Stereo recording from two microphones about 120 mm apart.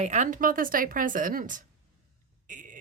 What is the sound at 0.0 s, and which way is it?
A woman's voice, 85° right.